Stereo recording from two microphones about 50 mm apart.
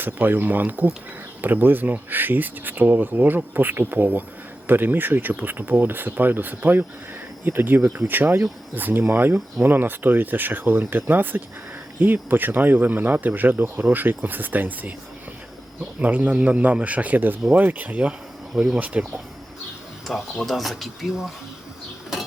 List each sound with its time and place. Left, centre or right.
0.0 s speech: right
16.0 s a man's voice: right
18.5 s speech: centre
20.1 s speech: centre